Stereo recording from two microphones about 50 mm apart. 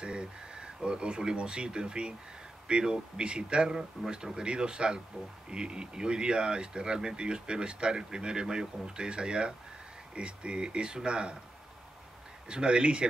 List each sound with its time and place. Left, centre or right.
0.0 s speech: centre
12.4 s speech: centre